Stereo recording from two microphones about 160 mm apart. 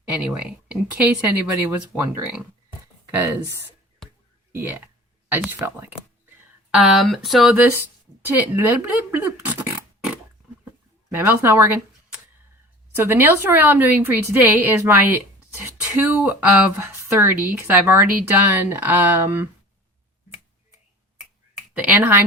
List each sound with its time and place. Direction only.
0.3 s a woman's voice: 5° right (ahead or behind)
6.7 s speech: centre (ahead or behind)
7.5 s a woman's voice: 10° right (ahead or behind)
10.7 s a sound: 15° right (ahead or behind)
13.0 s a woman's voice: 15° right (ahead or behind)
21.7 s a woman's voice: 10° right (ahead or behind)